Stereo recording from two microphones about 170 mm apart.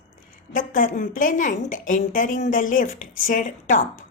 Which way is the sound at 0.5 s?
50° left (ahead or behind).